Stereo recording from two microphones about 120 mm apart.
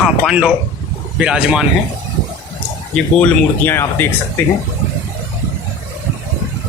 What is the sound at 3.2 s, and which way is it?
Speech, 20° left (ahead or behind).